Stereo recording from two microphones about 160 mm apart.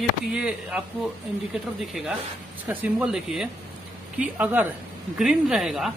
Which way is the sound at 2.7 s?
10° right (ahead or behind).